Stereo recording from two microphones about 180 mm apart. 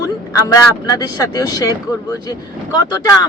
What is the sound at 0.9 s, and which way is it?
Speech, 20° left (ahead or behind).